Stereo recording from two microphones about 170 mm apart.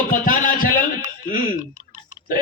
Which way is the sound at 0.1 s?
55° left (ahead or behind).